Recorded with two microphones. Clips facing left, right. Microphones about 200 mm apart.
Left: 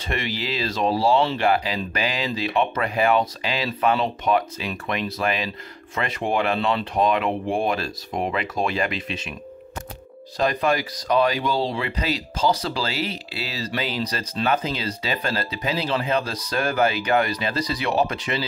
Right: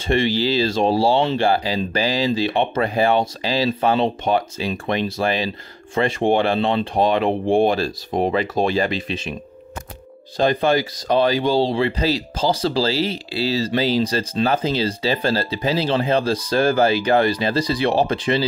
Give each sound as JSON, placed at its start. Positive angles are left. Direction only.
{"t": 0.0, "sound": "speech", "side_deg": -30}
{"t": 10.3, "sound": "speech", "side_deg": -30}